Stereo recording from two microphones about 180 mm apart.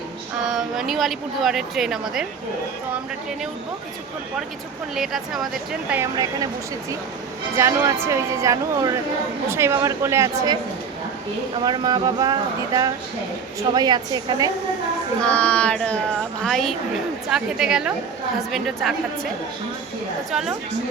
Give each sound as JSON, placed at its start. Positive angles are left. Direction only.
{"t": 0.4, "sound": "speech", "side_deg": 0}
{"t": 4.9, "sound": "speech", "side_deg": 0}
{"t": 5.9, "sound": "speech", "side_deg": -15}
{"t": 7.5, "sound": "speech", "side_deg": -15}
{"t": 11.6, "sound": "speech", "side_deg": -20}
{"t": 15.2, "sound": "child singing", "side_deg": 5}
{"t": 16.4, "sound": "speech", "side_deg": 0}